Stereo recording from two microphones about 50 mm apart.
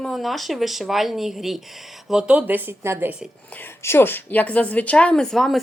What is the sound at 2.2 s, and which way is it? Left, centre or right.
Speech, right.